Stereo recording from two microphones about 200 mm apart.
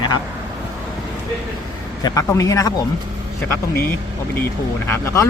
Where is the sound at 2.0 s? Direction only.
15° left (ahead or behind).